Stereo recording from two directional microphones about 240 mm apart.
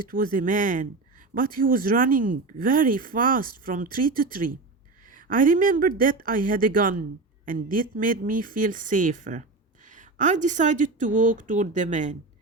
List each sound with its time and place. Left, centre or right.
0.0 s speech: right